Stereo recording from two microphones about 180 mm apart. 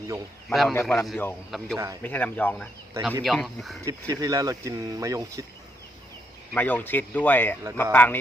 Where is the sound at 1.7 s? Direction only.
20° right (ahead or behind).